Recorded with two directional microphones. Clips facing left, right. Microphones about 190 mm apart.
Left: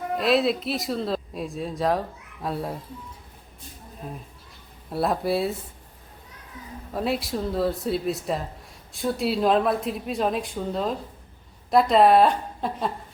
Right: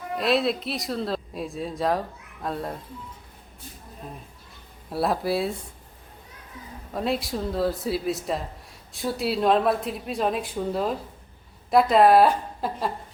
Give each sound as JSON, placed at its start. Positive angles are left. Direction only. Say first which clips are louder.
{"t": 0.2, "sound": "speech", "louder": "left 1 dB", "side_deg": 0}
{"t": 4.9, "sound": "speech", "louder": "left 1 dB", "side_deg": 0}
{"t": 6.9, "sound": "speech", "louder": "even", "side_deg": 0}